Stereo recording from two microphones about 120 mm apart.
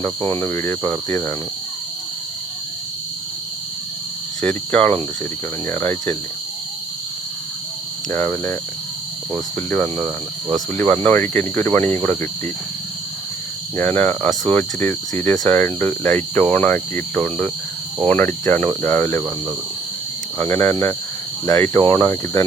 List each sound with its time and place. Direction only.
0.0 s speech: 20° left (ahead or behind)
4.4 s cricket: 10° left (ahead or behind)
5.6 s speech: 20° left (ahead or behind)
8.1 s speech: 20° left (ahead or behind)
9.6 s cricket: 20° left (ahead or behind)
13.7 s cricket: 15° left (ahead or behind)
20.4 s cricket: 15° left (ahead or behind)
21.5 s speech: 15° left (ahead or behind)